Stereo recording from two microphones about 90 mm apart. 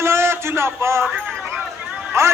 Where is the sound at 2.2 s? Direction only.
30° right (ahead or behind).